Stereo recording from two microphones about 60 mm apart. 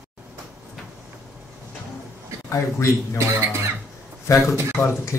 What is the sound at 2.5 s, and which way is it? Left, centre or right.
Speech, left.